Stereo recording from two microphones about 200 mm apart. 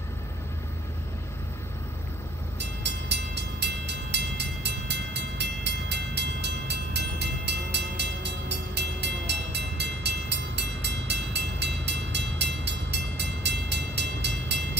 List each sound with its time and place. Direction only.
2.6 s train: 55° right (ahead or behind)